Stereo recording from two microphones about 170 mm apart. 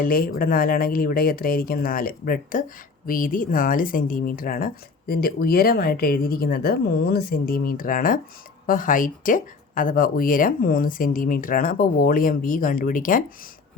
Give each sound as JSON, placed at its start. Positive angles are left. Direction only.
{"t": 0.0, "sound": "speech", "side_deg": 60}